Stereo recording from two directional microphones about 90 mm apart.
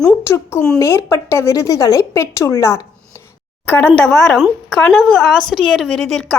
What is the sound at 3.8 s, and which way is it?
Speech, 10° left (ahead or behind).